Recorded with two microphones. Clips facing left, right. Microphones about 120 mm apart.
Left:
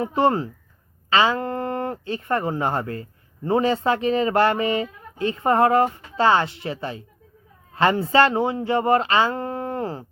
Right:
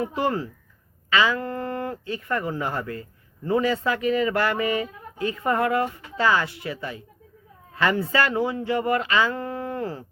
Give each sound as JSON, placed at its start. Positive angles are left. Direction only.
{"t": 0.2, "sound": "speech", "side_deg": 30}